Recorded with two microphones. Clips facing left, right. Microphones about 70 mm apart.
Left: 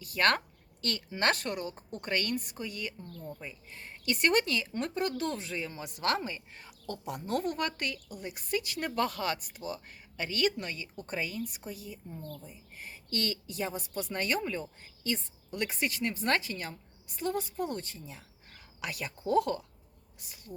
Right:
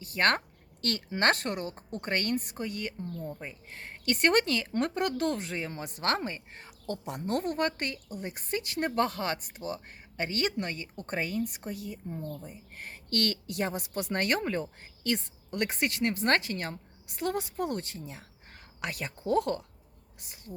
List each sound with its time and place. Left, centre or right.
0.0 s speech: right
3.0 s speech: right
3.4 s speech: right
17.1 s a woman's voice: right